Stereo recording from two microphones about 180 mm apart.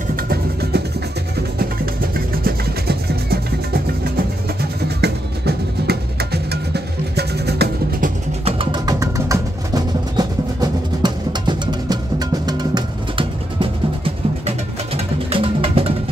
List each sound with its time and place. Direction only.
0.1 s music: 60° right (ahead or behind)
4.8 s music: 65° right (ahead or behind)
8.5 s music: 25° right (ahead or behind)